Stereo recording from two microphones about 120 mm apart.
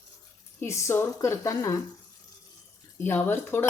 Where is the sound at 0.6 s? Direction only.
25° left (ahead or behind).